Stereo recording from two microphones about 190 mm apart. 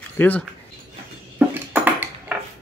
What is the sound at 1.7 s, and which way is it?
Ping, 10° right (ahead or behind).